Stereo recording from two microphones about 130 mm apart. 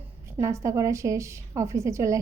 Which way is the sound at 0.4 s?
25° right (ahead or behind).